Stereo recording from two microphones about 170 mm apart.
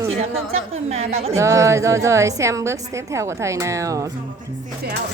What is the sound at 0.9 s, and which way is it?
Speech, 40° right (ahead or behind).